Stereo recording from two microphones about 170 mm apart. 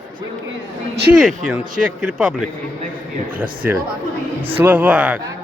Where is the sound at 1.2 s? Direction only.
Centre (ahead or behind).